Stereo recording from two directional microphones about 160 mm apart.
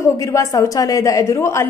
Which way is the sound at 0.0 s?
20° left (ahead or behind).